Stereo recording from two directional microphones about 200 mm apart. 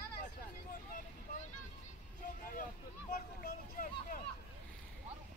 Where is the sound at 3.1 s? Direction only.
45° left (ahead or behind).